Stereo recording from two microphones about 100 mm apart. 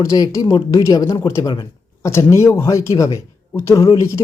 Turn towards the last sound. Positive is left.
turn(degrees=30)  # may be behind; listen again after turning